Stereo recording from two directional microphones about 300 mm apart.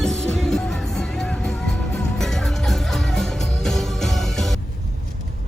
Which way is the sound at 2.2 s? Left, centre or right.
Centre.